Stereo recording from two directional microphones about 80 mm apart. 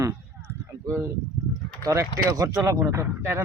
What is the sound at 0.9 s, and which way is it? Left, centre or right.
Speech, right.